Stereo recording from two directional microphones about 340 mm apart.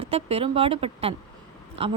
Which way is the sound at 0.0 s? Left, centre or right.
Centre.